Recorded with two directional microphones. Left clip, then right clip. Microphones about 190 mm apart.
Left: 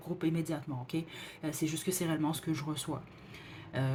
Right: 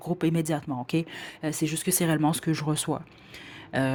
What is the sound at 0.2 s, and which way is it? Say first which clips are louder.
Speech: right 7 dB; 50° right (ahead or behind).